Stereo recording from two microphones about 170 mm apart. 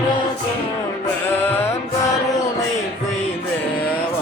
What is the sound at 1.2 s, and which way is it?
Music, 15° left (ahead or behind).